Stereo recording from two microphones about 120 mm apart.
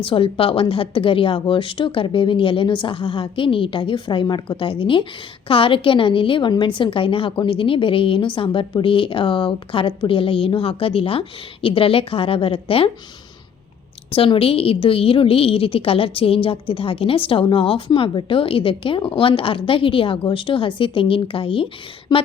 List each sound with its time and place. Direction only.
0.0 s a woman's voice: 50° left (ahead or behind)
14.1 s a woman's voice: 50° left (ahead or behind)
22.1 s a sound: 35° left (ahead or behind)